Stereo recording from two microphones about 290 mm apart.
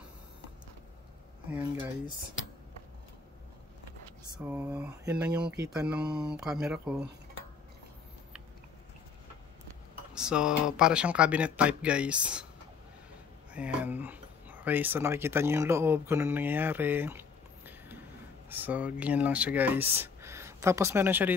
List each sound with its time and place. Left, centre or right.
4.4 s speech: centre
10.1 s speech: centre
13.5 s speech: centre